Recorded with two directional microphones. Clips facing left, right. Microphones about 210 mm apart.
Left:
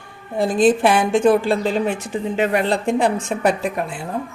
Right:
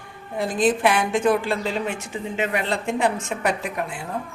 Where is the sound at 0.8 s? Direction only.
30° left (ahead or behind).